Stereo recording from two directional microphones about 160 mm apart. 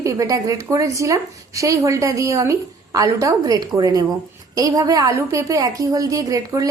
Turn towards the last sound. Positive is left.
turn(degrees=-20)  # may be behind; listen again after turning